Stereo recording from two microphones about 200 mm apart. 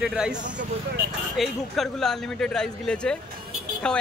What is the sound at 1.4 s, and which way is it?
A man's voice, centre (ahead or behind).